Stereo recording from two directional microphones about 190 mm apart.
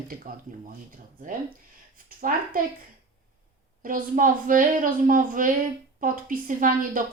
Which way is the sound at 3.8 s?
45° right (ahead or behind).